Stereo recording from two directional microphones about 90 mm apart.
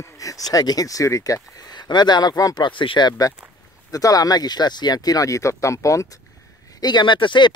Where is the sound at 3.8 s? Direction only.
40° left (ahead or behind).